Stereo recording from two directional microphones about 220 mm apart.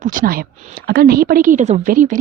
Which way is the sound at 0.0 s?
40° right (ahead or behind).